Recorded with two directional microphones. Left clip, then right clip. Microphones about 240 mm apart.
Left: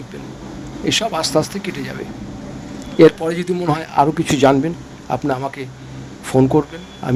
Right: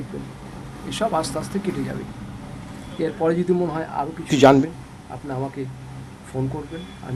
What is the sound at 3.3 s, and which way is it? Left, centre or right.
Speech, left.